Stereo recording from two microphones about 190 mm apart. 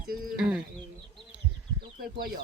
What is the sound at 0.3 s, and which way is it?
Bird, 5° right (ahead or behind).